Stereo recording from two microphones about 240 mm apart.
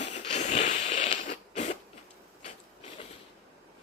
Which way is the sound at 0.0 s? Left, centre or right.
Left.